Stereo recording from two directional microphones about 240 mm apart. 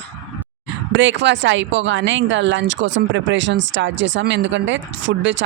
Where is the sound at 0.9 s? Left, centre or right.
Right.